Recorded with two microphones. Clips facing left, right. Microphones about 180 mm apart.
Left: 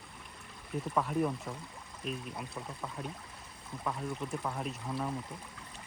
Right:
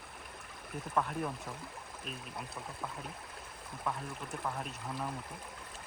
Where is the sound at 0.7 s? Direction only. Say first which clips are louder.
Left 2 dB; centre (ahead or behind).